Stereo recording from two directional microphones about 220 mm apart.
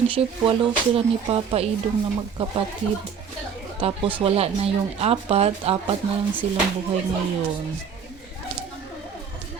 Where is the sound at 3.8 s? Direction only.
25° right (ahead or behind).